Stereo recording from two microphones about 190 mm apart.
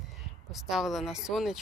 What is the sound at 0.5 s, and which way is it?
Speech, centre (ahead or behind).